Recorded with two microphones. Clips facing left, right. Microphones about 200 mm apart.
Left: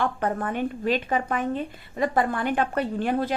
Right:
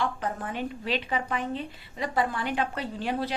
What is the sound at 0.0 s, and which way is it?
A woman's voice, 55° left (ahead or behind).